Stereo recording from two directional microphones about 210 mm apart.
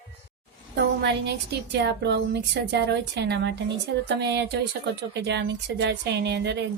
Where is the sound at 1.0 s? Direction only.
50° right (ahead or behind).